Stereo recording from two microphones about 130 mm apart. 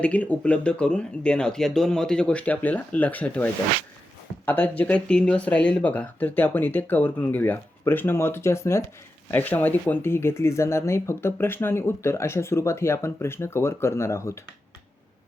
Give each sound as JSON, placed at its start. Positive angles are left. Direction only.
{"t": 0.0, "sound": "speech", "side_deg": 10}